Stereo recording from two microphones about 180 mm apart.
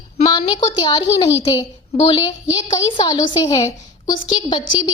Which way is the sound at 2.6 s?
20° left (ahead or behind).